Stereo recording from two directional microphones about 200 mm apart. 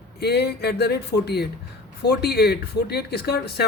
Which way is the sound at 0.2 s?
55° left (ahead or behind).